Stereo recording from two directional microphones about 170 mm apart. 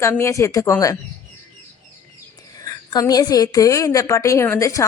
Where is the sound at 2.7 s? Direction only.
20° left (ahead or behind).